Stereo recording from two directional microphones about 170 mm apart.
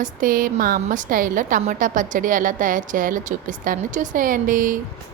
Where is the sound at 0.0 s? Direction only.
55° right (ahead or behind).